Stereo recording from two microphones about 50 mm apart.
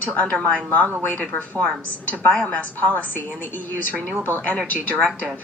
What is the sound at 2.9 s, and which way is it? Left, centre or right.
A woman's voice, left.